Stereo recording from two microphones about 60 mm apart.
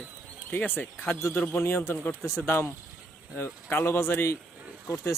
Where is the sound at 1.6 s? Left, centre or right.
Left.